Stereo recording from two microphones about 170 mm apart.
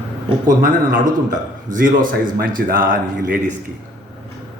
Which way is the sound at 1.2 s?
55° right (ahead or behind).